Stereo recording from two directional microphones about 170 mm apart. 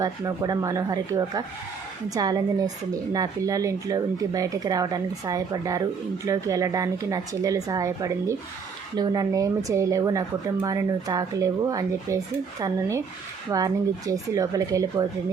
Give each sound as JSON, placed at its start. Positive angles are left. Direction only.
{"t": 0.0, "sound": "speech", "side_deg": -20}